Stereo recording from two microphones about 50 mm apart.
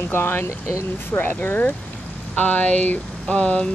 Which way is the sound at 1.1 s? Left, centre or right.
Left.